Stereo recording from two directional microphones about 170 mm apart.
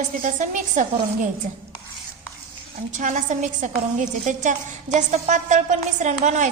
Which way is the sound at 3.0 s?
45° right (ahead or behind).